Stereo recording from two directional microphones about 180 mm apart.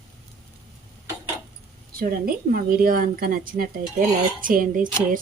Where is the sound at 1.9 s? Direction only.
55° right (ahead or behind).